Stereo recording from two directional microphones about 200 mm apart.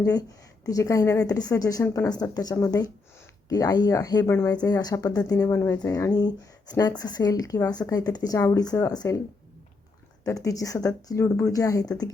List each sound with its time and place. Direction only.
0.0 s a woman's voice: 20° left (ahead or behind)
10.2 s a woman's voice: 15° left (ahead or behind)